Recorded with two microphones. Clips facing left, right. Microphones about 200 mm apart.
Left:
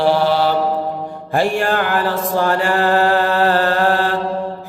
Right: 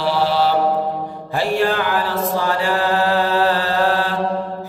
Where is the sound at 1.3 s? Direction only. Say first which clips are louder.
Left 1 dB; 50° left (ahead or behind).